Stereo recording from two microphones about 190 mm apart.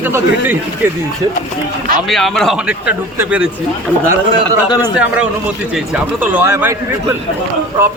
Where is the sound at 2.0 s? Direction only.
Centre (ahead or behind).